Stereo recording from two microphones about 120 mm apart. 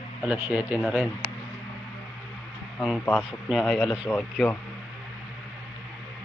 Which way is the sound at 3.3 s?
5° right (ahead or behind).